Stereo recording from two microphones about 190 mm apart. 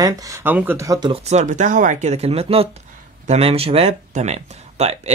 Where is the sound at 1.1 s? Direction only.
35° right (ahead or behind).